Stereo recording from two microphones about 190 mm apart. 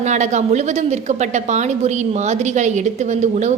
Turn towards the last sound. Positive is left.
turn(degrees=-40)  # may be behind; listen again after turning